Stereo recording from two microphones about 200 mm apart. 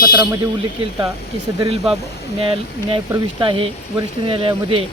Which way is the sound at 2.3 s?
25° right (ahead or behind).